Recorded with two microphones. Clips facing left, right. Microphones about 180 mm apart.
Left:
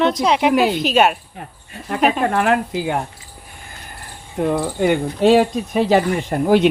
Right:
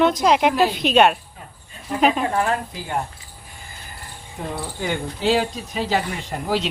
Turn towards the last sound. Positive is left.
turn(degrees=60)  # may be behind; listen again after turning